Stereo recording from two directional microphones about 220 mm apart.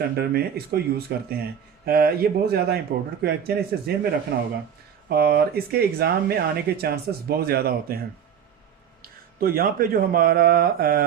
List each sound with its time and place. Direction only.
0.2 s speech: 45° right (ahead or behind)